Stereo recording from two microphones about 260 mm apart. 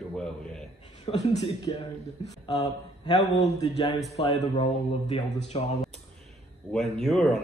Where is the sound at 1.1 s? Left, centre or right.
Left.